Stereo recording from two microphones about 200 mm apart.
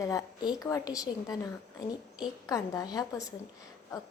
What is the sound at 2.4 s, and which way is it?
Speech, 20° left (ahead or behind).